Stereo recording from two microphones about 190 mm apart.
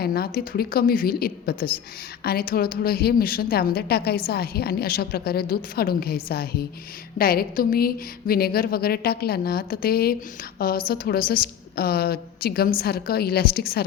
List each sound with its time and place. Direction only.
0.0 s a woman's voice: 55° left (ahead or behind)